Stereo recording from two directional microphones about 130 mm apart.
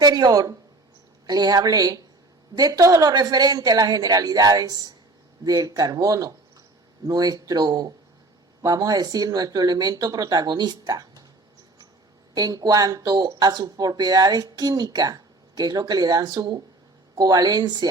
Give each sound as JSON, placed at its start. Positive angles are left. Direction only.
{"t": 0.0, "sound": "speech", "side_deg": -30}
{"t": 12.3, "sound": "speech", "side_deg": -30}